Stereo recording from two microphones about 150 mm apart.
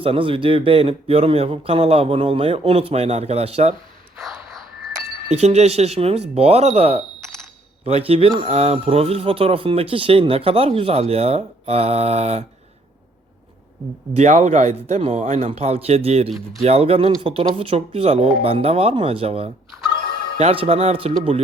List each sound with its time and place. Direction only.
0.0 s speech: 35° right (ahead or behind)
4.2 s ding: centre (ahead or behind)
5.3 s speech: 45° right (ahead or behind)
14.2 s speech: 50° right (ahead or behind)
16.3 s speech: centre (ahead or behind)
16.6 s speech: 40° right (ahead or behind)
19.7 s speech: centre (ahead or behind)
20.4 s speech: 40° right (ahead or behind)